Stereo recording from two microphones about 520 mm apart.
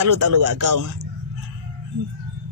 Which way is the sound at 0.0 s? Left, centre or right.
Right.